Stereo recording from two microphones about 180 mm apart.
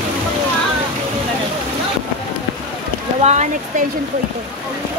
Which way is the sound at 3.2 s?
40° right (ahead or behind).